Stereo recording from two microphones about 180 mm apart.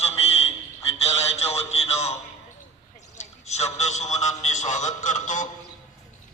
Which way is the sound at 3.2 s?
40° left (ahead or behind).